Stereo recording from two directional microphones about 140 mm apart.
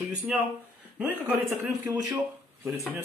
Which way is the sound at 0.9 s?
10° right (ahead or behind).